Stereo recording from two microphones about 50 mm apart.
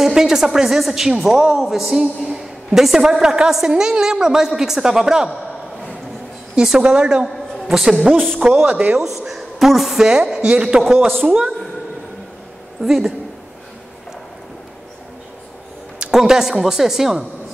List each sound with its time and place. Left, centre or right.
0.0 s a woman's voice: centre
6.5 s a woman's voice: centre
7.2 s a sound: centre
7.7 s a woman's voice: centre
8.6 s speech: right
8.9 s a woman's voice: centre
12.8 s a man's voice: centre
16.1 s a woman's voice: centre